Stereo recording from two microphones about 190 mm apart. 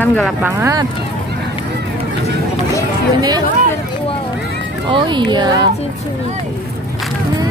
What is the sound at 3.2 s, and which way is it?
Speech, 20° right (ahead or behind).